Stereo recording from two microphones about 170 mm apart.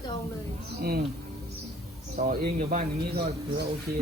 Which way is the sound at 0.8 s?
65° right (ahead or behind).